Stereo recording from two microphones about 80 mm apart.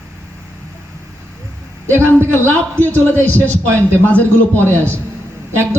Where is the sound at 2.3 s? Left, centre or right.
Left.